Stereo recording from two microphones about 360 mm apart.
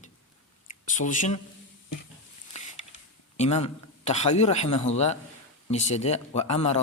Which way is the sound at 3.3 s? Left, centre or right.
Centre.